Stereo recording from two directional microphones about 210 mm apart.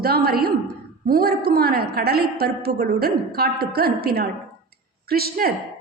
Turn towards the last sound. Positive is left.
turn(degrees=-45)  # may be behind; listen again after turning